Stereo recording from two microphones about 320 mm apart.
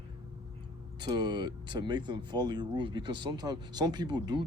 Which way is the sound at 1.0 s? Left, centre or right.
Centre.